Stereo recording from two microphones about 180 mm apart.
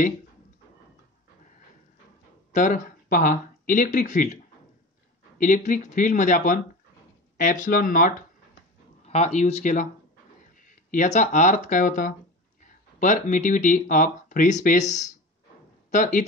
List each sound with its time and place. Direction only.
2.5 s speech: 45° left (ahead or behind)
5.4 s speech: 45° left (ahead or behind)
9.0 s speech: 40° left (ahead or behind)
10.9 s speech: 45° left (ahead or behind)